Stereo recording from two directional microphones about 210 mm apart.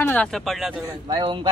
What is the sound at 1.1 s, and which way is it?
Speech, 25° right (ahead or behind).